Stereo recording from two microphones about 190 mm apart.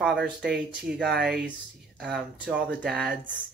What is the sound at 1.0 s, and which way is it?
Speech, 60° right (ahead or behind).